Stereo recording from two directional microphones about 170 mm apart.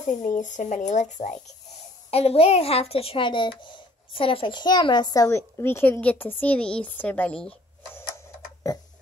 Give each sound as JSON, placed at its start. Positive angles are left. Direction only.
{"t": 0.0, "sound": "a child's voice", "side_deg": 45}
{"t": 8.6, "sound": "tick-tock", "side_deg": 20}